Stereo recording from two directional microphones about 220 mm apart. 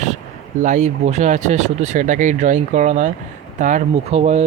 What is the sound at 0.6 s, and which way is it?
Speech, 35° right (ahead or behind).